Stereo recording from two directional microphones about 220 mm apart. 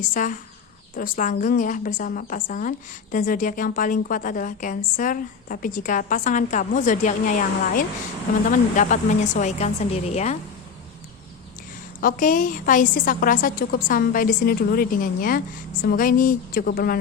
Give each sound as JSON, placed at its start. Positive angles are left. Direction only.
{"t": 0.1, "sound": "a woman's voice", "side_deg": 35}
{"t": 11.9, "sound": "a woman's voice", "side_deg": 35}